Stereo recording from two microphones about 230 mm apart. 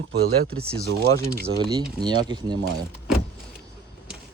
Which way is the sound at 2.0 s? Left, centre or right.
Centre.